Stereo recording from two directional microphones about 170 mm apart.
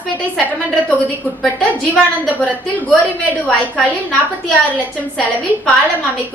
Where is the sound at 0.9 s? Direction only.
10° left (ahead or behind).